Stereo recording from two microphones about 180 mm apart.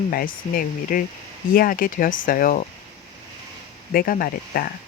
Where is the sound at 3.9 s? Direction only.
55° left (ahead or behind).